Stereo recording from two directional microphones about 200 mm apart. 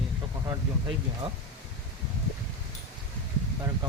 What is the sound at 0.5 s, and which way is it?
Speech, 25° right (ahead or behind).